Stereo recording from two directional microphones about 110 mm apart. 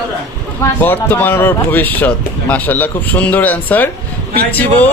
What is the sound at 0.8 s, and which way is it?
A man's voice, 15° left (ahead or behind).